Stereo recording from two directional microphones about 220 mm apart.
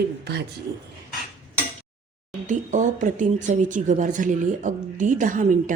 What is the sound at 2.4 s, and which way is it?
Speech, 35° right (ahead or behind).